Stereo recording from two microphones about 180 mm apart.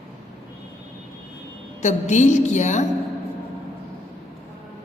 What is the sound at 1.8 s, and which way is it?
A woman's voice, 40° left (ahead or behind).